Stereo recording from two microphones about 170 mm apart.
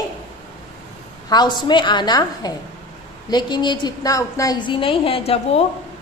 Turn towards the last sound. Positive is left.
turn(degrees=35)  # may be behind; listen again after turning